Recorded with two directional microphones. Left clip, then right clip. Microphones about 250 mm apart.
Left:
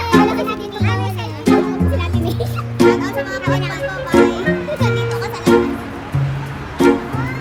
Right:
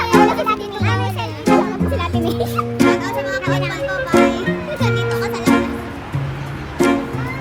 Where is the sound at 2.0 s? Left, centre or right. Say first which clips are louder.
Right 2 dB; centre.